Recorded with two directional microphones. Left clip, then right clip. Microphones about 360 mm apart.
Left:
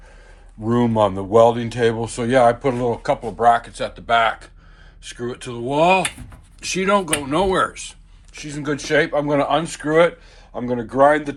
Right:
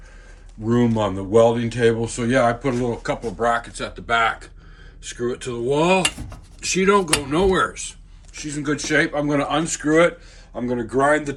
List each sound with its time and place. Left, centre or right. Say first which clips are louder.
0.7 s speech: left 3 dB; centre